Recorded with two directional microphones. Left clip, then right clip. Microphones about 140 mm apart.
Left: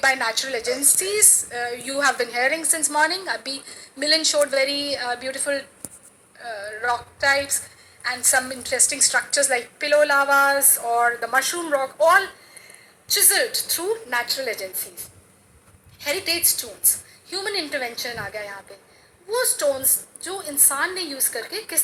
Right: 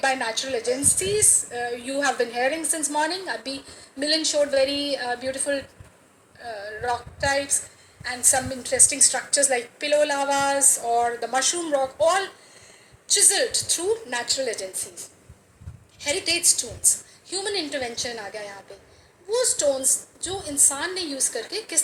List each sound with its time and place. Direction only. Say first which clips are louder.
0.0 s a woman's voice: left 3 dB; 20° right (ahead or behind)